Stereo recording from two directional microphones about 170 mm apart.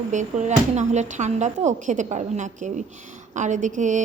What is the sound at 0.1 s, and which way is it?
A woman's voice, 45° right (ahead or behind).